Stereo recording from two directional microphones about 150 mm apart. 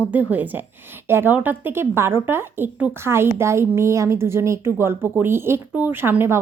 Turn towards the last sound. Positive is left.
turn(degrees=-15)  # may be behind; listen again after turning